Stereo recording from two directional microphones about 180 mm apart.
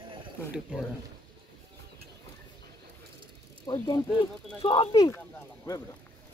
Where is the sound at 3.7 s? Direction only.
25° left (ahead or behind).